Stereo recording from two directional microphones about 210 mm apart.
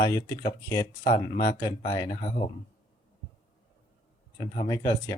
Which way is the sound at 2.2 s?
35° left (ahead or behind).